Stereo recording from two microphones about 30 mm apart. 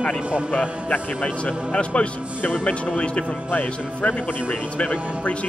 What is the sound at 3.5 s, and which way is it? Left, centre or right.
Speech, left.